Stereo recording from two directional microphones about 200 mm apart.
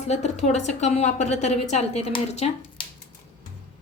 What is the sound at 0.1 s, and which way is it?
A woman's voice, 35° left (ahead or behind).